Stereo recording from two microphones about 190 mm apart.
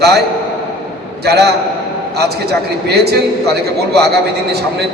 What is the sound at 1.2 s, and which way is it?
Speech, 60° right (ahead or behind).